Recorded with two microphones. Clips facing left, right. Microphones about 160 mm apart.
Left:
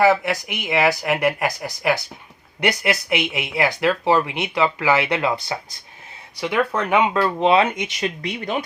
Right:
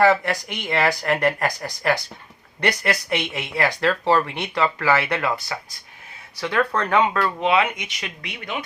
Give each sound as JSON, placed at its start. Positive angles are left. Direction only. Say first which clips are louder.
{"t": 0.0, "sound": "speech", "louder": "left 1 dB", "side_deg": 5}